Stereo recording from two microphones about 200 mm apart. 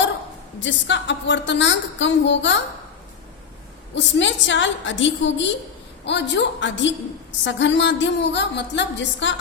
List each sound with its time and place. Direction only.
0.6 s a woman's voice: 60° left (ahead or behind)
3.9 s a woman's voice: 65° left (ahead or behind)